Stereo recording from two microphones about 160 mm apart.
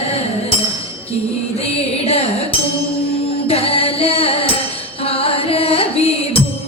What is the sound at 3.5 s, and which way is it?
Music, 35° left (ahead or behind).